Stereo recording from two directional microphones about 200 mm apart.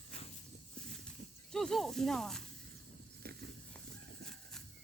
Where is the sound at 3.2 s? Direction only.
50° right (ahead or behind).